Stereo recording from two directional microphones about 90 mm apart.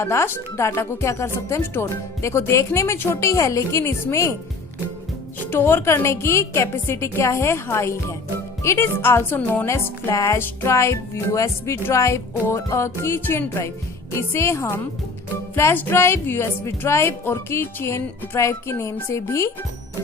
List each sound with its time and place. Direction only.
0.0 s speech: 30° left (ahead or behind)
5.5 s a woman's voice: 25° left (ahead or behind)